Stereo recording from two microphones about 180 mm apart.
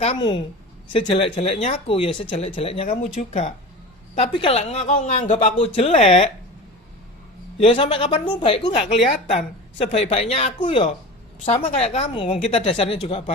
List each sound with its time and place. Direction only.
0.2 s a woman's voice: 25° left (ahead or behind); by 3.5 s 40° left (ahead or behind)
4.1 s speech: 30° left (ahead or behind)
7.6 s speech: 30° left (ahead or behind)